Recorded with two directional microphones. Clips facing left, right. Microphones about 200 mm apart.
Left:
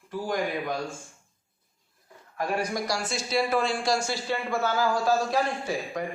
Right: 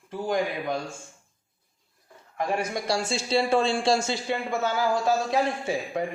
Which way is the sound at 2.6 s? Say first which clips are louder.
Right 1 dB; 25° right (ahead or behind).